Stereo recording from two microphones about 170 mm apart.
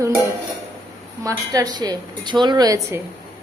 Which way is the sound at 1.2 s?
20° right (ahead or behind).